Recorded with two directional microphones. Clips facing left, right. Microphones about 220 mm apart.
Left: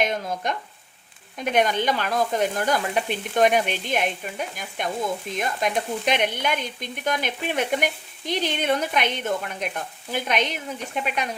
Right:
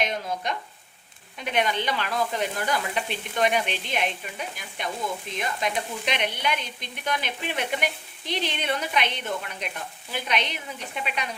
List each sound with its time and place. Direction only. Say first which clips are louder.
0.0 s frying: left 3 dB; 50° left (ahead or behind)
1.4 s stir: left 4 dB; 45° left (ahead or behind)